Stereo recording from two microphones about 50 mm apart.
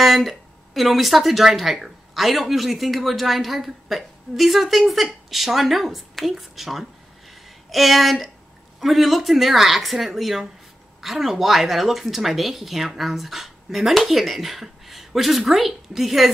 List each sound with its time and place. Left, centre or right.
0.0 s speech: centre